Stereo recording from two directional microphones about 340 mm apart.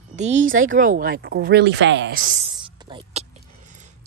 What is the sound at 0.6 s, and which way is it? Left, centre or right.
Speech, right.